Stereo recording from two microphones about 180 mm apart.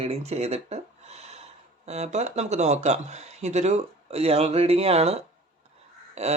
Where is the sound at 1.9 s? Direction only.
40° right (ahead or behind).